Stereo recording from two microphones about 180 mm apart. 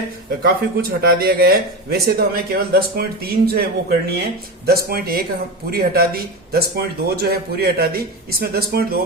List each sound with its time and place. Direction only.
0.4 s speech: 55° right (ahead or behind)